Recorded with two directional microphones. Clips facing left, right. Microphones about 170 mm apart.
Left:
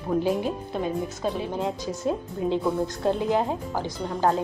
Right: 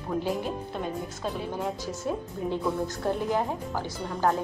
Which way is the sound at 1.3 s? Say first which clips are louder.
Left 3 dB; 20° left (ahead or behind).